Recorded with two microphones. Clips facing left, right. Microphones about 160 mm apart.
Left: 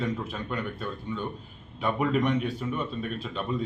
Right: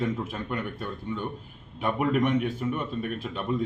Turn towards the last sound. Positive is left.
turn(degrees=-10)  # may be behind; listen again after turning